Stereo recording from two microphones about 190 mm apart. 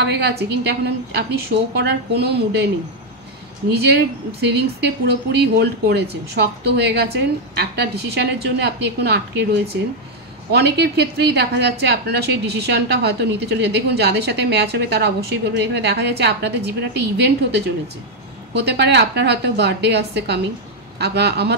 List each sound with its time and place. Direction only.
0.0 s a woman's voice: 60° right (ahead or behind)
3.7 s a woman's voice: 55° right (ahead or behind)
10.5 s a woman's voice: 60° right (ahead or behind)